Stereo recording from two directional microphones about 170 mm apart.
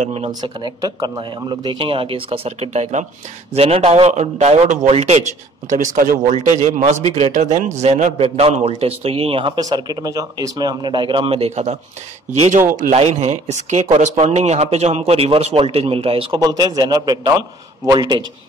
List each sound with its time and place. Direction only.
0.0 s a man's voice: 35° right (ahead or behind)
0.3 s a man's voice: 25° right (ahead or behind)
5.7 s a man's voice: 50° right (ahead or behind)
9.6 s a man's voice: 25° right (ahead or behind)